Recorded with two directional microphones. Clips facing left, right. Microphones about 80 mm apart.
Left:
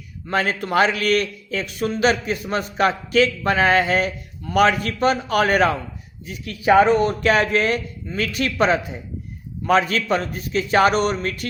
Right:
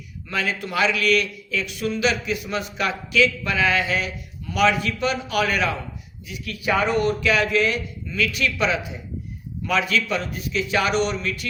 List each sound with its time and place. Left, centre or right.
0.3 s a man's voice: left